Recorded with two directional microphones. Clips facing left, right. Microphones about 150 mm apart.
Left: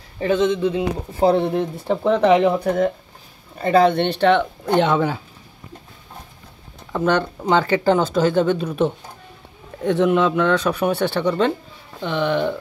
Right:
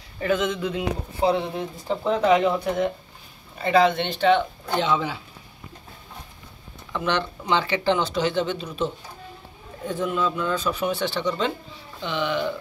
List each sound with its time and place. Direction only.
0.2 s speech: 30° left (ahead or behind)
1.2 s speech: 50° left (ahead or behind)
2.6 s speech: 45° left (ahead or behind)
6.9 s speech: 45° left (ahead or behind); by 8.9 s 60° left (ahead or behind)
9.8 s speech: 75° left (ahead or behind); by 12.5 s 55° left (ahead or behind)